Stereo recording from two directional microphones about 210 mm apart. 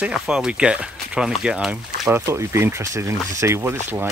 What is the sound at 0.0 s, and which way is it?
Speech, 5° right (ahead or behind).